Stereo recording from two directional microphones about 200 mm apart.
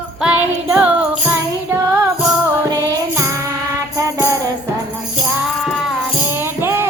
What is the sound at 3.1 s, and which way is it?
Music, 15° right (ahead or behind).